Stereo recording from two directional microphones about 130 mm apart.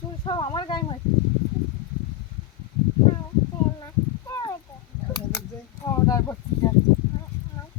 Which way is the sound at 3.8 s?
25° left (ahead or behind).